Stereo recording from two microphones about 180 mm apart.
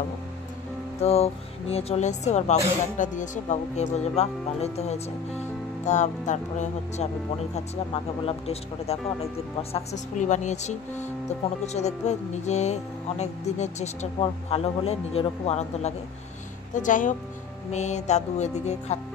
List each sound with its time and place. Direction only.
1.0 s speech: 35° left (ahead or behind)